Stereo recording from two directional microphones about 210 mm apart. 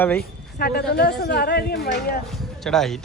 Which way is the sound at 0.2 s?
50° left (ahead or behind).